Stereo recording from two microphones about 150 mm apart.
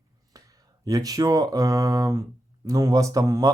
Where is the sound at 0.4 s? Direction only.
25° right (ahead or behind).